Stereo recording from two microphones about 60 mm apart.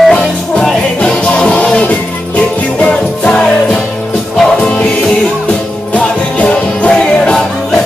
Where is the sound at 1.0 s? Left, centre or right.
Centre.